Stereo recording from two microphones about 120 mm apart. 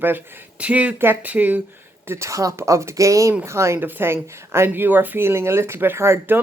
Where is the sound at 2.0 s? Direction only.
25° right (ahead or behind).